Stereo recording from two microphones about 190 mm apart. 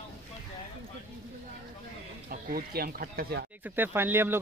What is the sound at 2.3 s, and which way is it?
Speech, 50° right (ahead or behind).